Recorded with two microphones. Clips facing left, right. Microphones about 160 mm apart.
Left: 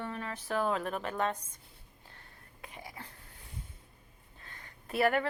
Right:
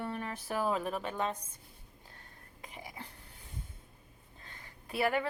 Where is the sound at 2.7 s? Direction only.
15° right (ahead or behind).